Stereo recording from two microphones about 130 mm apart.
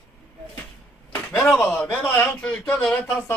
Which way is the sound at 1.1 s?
15° left (ahead or behind).